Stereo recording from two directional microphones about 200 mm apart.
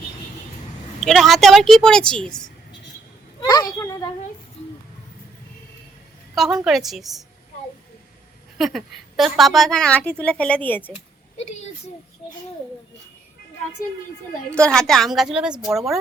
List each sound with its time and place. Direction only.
1.0 s speech: centre (ahead or behind)
3.4 s children playing: 20° left (ahead or behind)
6.3 s a woman's voice: centre (ahead or behind)
8.5 s a woman's voice: centre (ahead or behind)
14.5 s a woman's voice: 5° left (ahead or behind)